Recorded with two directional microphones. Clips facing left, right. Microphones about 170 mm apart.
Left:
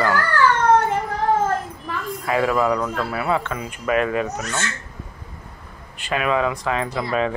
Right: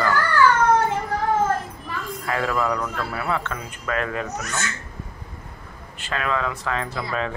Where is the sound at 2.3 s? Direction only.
20° left (ahead or behind).